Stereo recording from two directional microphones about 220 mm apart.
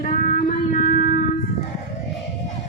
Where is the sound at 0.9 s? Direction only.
40° left (ahead or behind).